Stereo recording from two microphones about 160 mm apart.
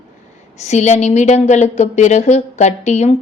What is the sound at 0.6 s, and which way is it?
A woman's voice, 45° left (ahead or behind).